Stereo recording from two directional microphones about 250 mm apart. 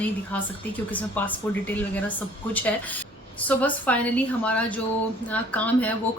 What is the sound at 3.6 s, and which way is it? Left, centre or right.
Speech, centre.